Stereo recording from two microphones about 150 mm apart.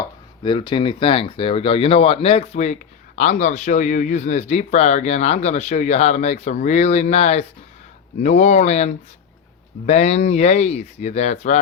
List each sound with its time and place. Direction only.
0.0 s speech: 30° left (ahead or behind); by 11.6 s 50° left (ahead or behind)